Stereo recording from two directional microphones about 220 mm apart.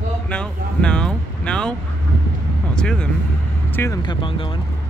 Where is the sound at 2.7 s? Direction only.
5° left (ahead or behind); by 4.6 s 25° left (ahead or behind).